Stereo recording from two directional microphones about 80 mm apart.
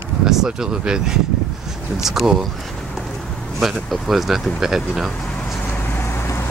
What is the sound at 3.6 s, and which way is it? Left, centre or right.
Speech, centre.